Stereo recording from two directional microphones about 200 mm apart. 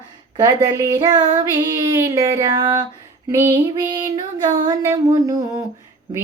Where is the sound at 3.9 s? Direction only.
20° right (ahead or behind).